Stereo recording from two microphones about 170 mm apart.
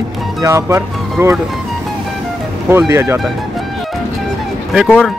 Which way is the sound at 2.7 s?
15° right (ahead or behind).